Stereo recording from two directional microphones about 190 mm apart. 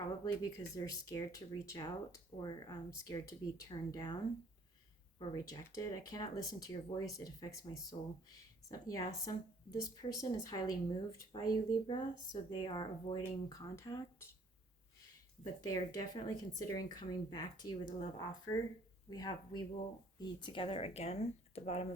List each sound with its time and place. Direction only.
0.3 s speech: 15° left (ahead or behind)
5.3 s a woman's voice: 20° left (ahead or behind)
15.6 s speech: 20° left (ahead or behind)